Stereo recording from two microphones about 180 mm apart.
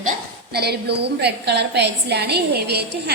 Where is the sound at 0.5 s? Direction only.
65° right (ahead or behind).